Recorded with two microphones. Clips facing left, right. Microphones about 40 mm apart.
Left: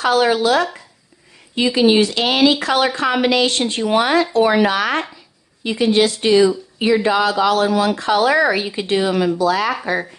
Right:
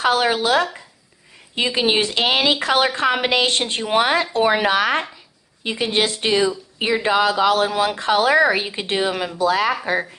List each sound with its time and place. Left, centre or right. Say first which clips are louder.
0.0 s speech: left 3 dB; right
1.8 s speech: left 5 dB; right